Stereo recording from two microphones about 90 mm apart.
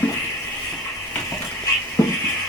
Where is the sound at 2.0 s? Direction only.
30° left (ahead or behind).